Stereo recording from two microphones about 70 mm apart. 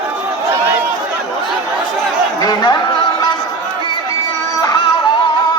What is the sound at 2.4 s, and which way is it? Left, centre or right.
Chatter, left.